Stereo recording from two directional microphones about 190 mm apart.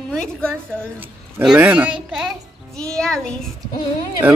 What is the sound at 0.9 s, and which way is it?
A child's voice, 5° right (ahead or behind).